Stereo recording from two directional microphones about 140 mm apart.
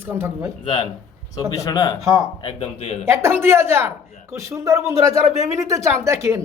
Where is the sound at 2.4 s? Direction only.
40° left (ahead or behind).